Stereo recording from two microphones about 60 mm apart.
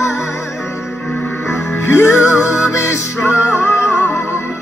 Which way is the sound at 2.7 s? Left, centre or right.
Left.